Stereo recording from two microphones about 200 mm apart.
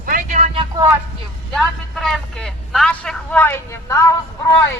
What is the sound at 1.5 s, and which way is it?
A man's voice, centre (ahead or behind).